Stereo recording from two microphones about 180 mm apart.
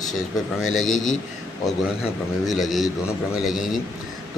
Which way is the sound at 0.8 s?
90° left.